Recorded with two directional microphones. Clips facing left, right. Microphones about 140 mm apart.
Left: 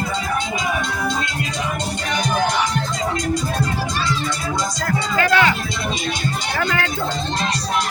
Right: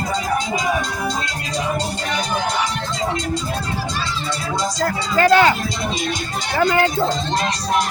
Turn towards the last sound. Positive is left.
turn(degrees=-30)  # may be behind; listen again after turning